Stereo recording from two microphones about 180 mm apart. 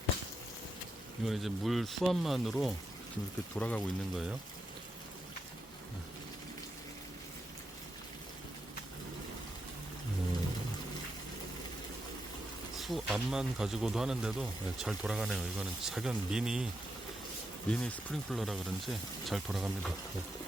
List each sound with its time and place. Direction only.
1.2 s speech: centre (ahead or behind)
12.7 s speech: centre (ahead or behind)
17.7 s speech: 5° left (ahead or behind)